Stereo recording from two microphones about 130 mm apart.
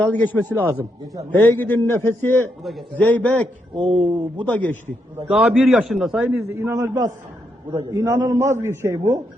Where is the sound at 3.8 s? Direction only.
40° right (ahead or behind).